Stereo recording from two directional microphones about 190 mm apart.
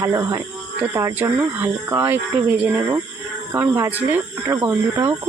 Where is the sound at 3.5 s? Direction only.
10° right (ahead or behind).